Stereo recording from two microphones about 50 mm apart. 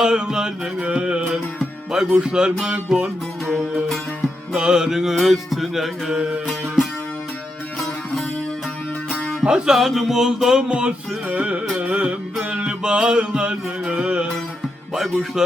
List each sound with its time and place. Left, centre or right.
0.0 s music: centre
0.8 s mantra: right
1.3 s music: centre
2.1 s mantra: centre
4.5 s music: centre
9.0 s music: centre
10.6 s mantra: right
11.8 s music: right
12.8 s mantra: centre
14.9 s music: centre